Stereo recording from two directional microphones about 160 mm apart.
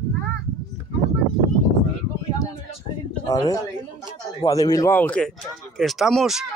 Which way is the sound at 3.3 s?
20° left (ahead or behind).